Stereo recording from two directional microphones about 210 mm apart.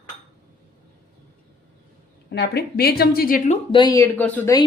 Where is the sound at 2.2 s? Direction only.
55° left (ahead or behind).